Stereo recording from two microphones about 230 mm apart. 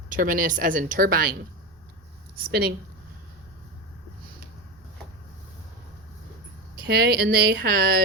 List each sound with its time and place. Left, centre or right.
0.1 s speech: right
6.8 s a woman's voice: right